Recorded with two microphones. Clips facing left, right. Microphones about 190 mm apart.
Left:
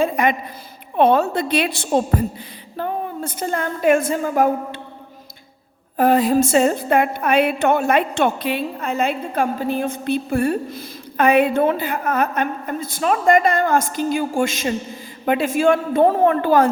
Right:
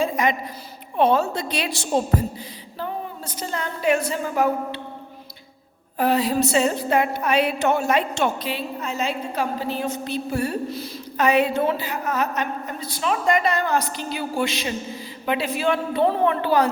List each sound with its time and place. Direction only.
0.0 s a sound: 55° left (ahead or behind)
0.9 s a woman's voice: 60° left (ahead or behind)
6.0 s a woman's voice: 50° left (ahead or behind)